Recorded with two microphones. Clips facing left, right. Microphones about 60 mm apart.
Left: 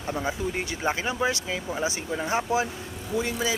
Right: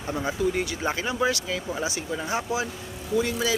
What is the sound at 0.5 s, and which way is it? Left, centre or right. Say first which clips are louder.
Speech: right 1 dB; left.